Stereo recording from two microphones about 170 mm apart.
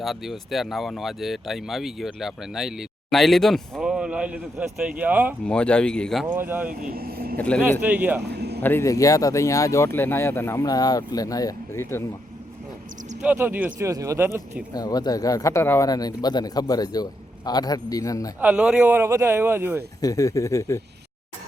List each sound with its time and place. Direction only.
0.0 s speech: centre (ahead or behind)
5.5 s speech: 5° left (ahead or behind)
6.3 s speech: 10° right (ahead or behind)
6.8 s speech: 60° right (ahead or behind)
7.3 s speech: 5° left (ahead or behind)
7.6 s speech: 10° right (ahead or behind)
8.3 s a sound: 75° right (ahead or behind)
8.6 s speech: 15° left (ahead or behind)
13.2 s speech: 10° right (ahead or behind)
14.7 s speech: 20° left (ahead or behind)
18.3 s speech: 5° right (ahead or behind)
20.0 s speech: 20° left (ahead or behind)